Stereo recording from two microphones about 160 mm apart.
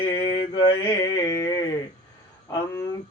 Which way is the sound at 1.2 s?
20° left (ahead or behind).